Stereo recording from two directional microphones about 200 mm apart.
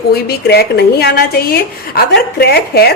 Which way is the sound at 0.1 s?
55° left (ahead or behind).